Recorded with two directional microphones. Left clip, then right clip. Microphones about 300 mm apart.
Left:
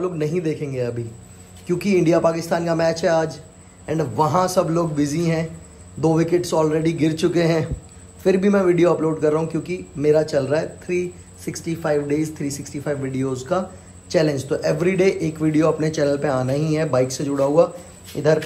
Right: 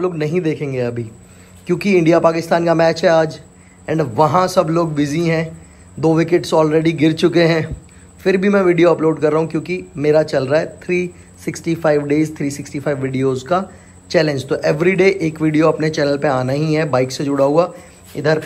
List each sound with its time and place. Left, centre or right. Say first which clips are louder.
0.0 s speech: right 4 dB; centre